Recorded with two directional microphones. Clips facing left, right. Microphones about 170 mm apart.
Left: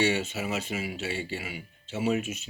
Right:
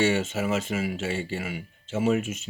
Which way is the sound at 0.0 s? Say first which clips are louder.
Right 3 dB; 50° right (ahead or behind).